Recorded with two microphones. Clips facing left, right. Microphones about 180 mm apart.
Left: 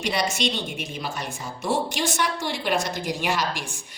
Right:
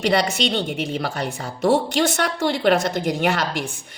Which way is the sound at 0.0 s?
60° right (ahead or behind).